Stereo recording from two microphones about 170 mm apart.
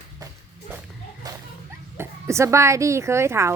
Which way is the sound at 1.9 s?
15° right (ahead or behind).